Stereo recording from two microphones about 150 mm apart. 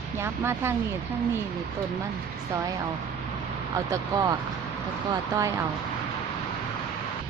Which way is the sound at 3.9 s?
25° right (ahead or behind).